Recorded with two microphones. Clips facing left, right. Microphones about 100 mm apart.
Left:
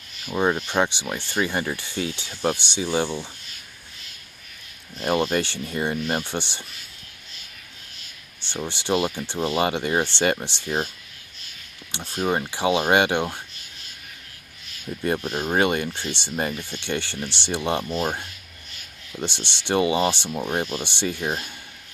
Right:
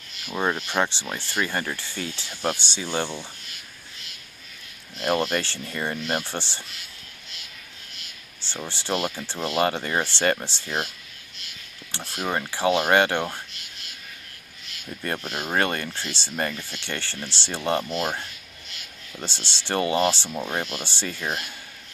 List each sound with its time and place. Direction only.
0.2 s speech: 10° left (ahead or behind)
4.9 s speech: 15° left (ahead or behind)
8.6 s speech: 20° left (ahead or behind)
11.9 s speech: 20° left (ahead or behind)
15.1 s speech: 15° left (ahead or behind)
19.2 s speech: 20° left (ahead or behind)